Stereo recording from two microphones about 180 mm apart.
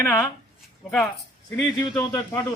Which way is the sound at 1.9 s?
10° left (ahead or behind).